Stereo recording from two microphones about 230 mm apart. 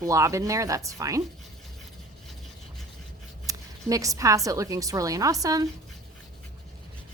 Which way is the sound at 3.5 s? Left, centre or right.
Centre.